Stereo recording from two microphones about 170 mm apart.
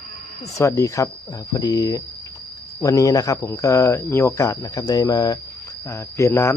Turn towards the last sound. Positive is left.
turn(degrees=15)  # may be behind; listen again after turning